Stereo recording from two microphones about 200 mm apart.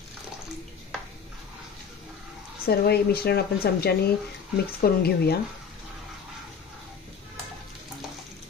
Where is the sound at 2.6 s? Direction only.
50° left (ahead or behind).